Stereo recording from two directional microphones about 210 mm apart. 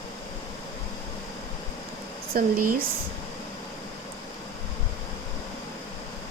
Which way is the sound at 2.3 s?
40° right (ahead or behind).